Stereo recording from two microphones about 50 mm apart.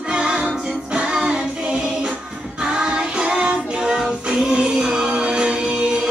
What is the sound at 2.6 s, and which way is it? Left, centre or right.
Child singing, centre.